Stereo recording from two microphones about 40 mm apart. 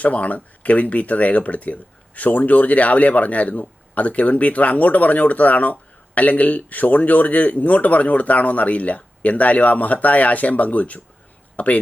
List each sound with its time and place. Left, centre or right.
0.0 s speech: left